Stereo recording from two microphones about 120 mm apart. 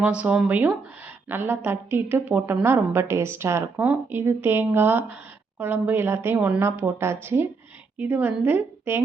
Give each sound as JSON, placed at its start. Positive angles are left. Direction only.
{"t": 0.0, "sound": "a woman's voice", "side_deg": -10}